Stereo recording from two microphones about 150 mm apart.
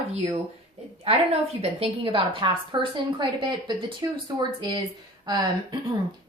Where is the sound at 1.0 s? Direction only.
45° right (ahead or behind).